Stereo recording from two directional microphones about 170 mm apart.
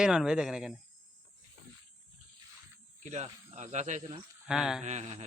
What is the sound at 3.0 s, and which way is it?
Speech, 45° right (ahead or behind).